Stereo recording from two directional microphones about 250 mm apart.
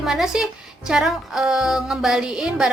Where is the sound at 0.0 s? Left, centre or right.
Centre.